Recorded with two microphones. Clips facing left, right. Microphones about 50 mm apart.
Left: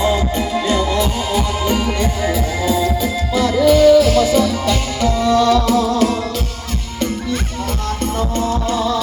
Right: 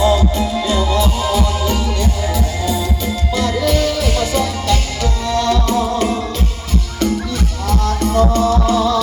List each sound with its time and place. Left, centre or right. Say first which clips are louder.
0.0 s music: right 2 dB; left
2.3 s music: left 2 dB; centre
4.7 s music: left 2 dB; centre
5.7 s music: left 1 dB; centre
7.7 s music: right 5 dB; left